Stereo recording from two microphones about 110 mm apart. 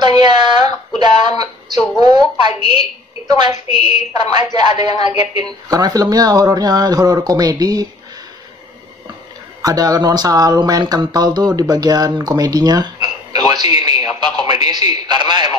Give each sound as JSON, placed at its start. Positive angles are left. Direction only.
{"t": 0.0, "sound": "a sound", "side_deg": -40}
{"t": 2.0, "sound": "a woman's voice", "side_deg": -40}
{"t": 9.6, "sound": "speech", "side_deg": -35}